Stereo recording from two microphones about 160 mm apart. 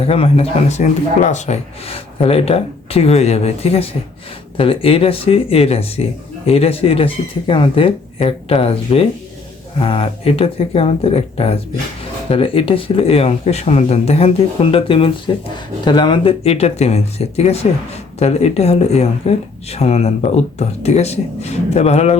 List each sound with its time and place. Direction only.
0.0 s speech: 35° left (ahead or behind)